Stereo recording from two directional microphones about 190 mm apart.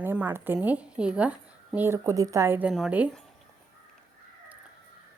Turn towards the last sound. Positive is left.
turn(degrees=-5)  # may be behind; listen again after turning